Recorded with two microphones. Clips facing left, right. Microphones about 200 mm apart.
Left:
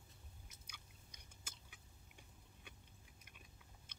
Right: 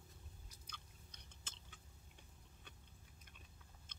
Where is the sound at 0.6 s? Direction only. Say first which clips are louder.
Right 2 dB; 10° left (ahead or behind).